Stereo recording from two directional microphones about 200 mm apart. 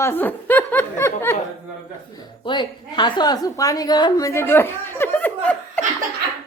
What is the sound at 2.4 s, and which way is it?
A woman's voice, 25° left (ahead or behind).